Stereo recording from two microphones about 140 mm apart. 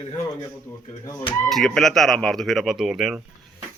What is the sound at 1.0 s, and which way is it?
Speech, 25° left (ahead or behind).